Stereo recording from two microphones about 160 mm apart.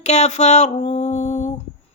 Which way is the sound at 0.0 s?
45° left (ahead or behind).